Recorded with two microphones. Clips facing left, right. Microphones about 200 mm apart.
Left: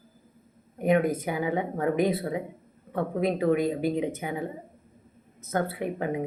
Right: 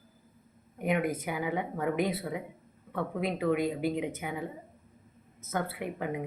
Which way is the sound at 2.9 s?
45° left (ahead or behind).